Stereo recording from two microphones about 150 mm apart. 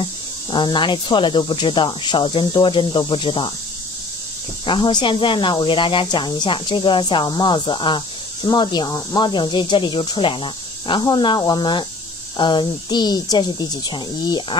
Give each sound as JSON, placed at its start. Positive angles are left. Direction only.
{"t": 0.0, "sound": "speech", "side_deg": 30}
{"t": 4.6, "sound": "speech", "side_deg": 35}